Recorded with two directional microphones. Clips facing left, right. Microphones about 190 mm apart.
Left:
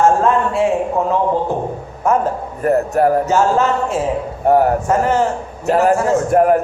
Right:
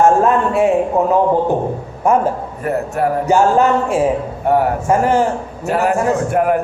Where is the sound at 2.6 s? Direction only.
40° left (ahead or behind).